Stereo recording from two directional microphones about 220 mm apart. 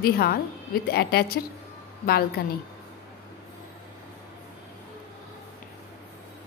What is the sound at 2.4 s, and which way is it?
Speech, 45° left (ahead or behind).